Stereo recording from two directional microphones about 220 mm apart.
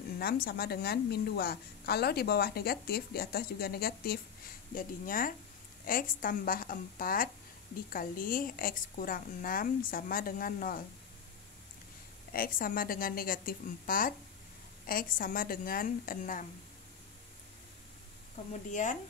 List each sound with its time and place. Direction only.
0.2 s a woman's voice: 45° left (ahead or behind)
12.3 s a woman's voice: 40° left (ahead or behind)
18.5 s a woman's voice: 35° left (ahead or behind)